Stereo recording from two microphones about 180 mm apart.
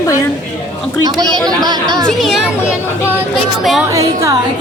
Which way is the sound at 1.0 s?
20° right (ahead or behind).